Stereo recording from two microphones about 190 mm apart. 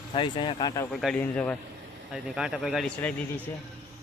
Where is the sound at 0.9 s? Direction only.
Centre (ahead or behind).